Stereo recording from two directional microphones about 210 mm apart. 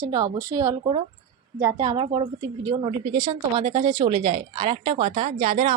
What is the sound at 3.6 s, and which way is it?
Speech, 30° right (ahead or behind).